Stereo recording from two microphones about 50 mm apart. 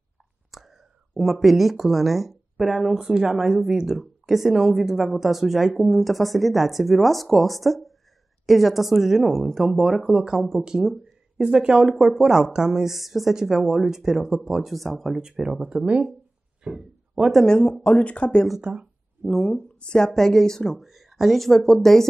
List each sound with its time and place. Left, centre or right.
0.5 s speech: centre; by 16.1 s right
16.6 s a sound: centre
17.5 s speech: centre
18.6 s speech: right
19.4 s speech: left; by 22.0 s centre